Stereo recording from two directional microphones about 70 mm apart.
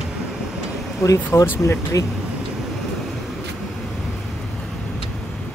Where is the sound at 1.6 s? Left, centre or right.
Left.